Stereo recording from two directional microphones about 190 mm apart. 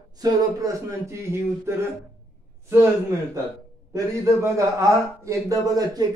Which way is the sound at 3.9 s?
15° right (ahead or behind).